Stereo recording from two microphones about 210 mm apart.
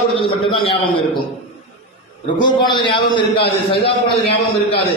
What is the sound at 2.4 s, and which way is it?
A man's voice, 20° left (ahead or behind).